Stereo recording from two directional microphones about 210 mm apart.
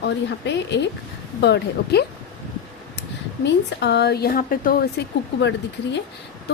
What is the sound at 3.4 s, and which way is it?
A woman's voice, 55° left (ahead or behind).